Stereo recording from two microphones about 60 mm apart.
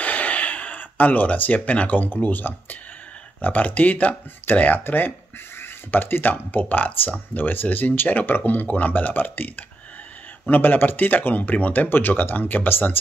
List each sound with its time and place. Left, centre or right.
0.0 s speech: left